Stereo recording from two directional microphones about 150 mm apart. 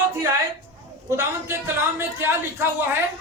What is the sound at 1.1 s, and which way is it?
A woman's voice, 15° right (ahead or behind).